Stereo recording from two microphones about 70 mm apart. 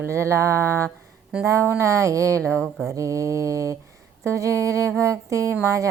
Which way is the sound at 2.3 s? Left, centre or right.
Centre.